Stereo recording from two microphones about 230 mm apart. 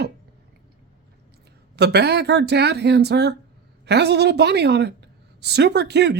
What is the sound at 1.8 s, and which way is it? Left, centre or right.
A woman's voice, right.